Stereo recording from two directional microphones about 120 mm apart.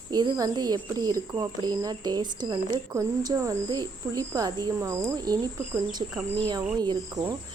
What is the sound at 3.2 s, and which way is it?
Speech, 25° right (ahead or behind).